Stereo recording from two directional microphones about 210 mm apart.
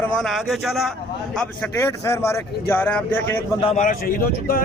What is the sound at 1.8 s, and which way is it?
Speech, 15° left (ahead or behind).